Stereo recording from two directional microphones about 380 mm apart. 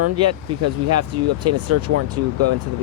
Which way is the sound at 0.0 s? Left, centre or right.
Right.